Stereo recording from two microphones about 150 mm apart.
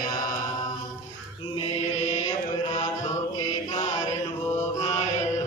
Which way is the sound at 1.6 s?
45° left (ahead or behind).